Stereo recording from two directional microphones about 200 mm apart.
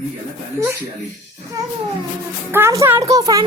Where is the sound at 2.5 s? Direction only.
15° right (ahead or behind).